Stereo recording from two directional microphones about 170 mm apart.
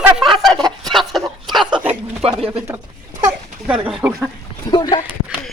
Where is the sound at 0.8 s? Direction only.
Centre (ahead or behind).